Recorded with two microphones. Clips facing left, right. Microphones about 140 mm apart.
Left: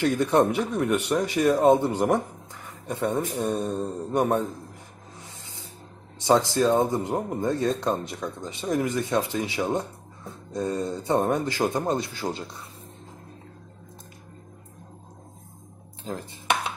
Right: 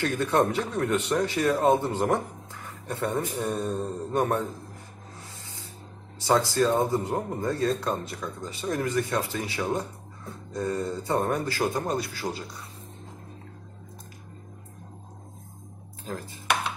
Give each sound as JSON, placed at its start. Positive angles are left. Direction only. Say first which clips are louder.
{"t": 0.0, "sound": "speech", "louder": "left 3 dB", "side_deg": 15}
{"t": 5.4, "sound": "spray", "louder": "even", "side_deg": 20}
{"t": 6.1, "sound": "speech", "louder": "left 2 dB", "side_deg": 20}
{"t": 16.0, "sound": "speech", "louder": "left 2 dB", "side_deg": 25}